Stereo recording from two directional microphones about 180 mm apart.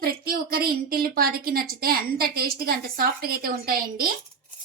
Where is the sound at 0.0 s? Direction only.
55° right (ahead or behind).